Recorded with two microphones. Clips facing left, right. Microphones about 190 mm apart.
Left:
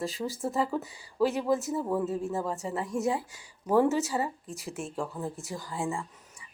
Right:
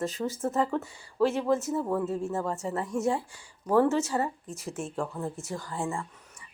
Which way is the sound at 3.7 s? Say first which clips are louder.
Right 1 dB; 15° left (ahead or behind).